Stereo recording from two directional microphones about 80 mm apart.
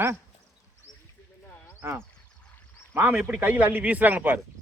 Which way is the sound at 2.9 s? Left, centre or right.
Right.